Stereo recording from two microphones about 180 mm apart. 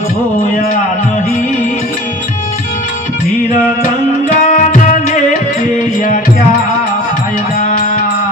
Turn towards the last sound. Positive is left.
turn(degrees=50)  # may be behind; listen again after turning